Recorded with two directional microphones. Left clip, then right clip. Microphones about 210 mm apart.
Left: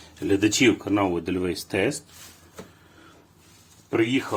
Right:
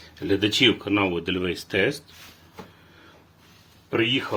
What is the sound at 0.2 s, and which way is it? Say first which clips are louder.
Speech: right 1 dB; 30° left (ahead or behind).